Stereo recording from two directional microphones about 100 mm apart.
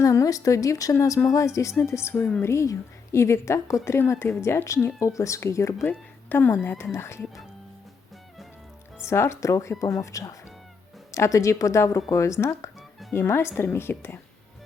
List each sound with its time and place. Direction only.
0.0 s a woman's voice: 35° left (ahead or behind)
2.1 s a woman's voice: 15° left (ahead or behind)
2.4 s a woman's voice: 30° left (ahead or behind)
5.9 s a woman's voice: 20° left (ahead or behind)
9.0 s a woman's voice: 25° left (ahead or behind)